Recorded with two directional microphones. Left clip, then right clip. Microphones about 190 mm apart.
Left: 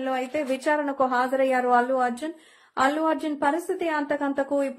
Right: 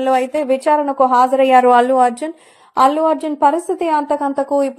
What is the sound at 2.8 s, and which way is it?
A woman's voice, 30° right (ahead or behind).